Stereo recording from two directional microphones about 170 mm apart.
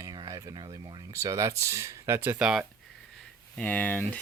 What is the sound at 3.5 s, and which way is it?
Speech, 10° left (ahead or behind).